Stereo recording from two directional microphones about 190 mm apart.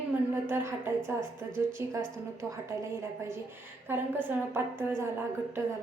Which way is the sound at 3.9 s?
10° right (ahead or behind).